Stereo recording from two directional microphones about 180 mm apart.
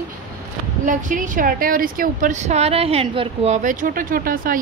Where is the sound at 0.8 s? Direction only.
45° right (ahead or behind).